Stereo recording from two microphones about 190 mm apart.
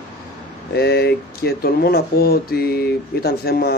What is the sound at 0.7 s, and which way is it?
Speech, 60° left (ahead or behind).